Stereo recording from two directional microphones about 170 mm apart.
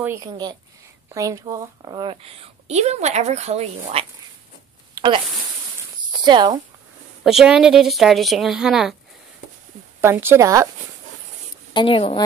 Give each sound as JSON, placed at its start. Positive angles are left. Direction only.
{"t": 0.0, "sound": "a woman's voice", "side_deg": -20}
{"t": 4.9, "sound": "zipper", "side_deg": -25}
{"t": 6.2, "sound": "a woman's voice", "side_deg": -25}
{"t": 7.2, "sound": "a woman's voice", "side_deg": -5}
{"t": 9.9, "sound": "speech", "side_deg": -15}
{"t": 11.7, "sound": "a woman's voice", "side_deg": 30}